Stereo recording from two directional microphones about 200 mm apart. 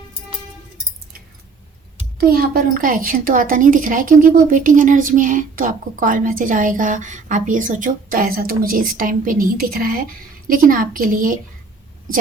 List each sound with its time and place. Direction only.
2.2 s speech: 50° right (ahead or behind)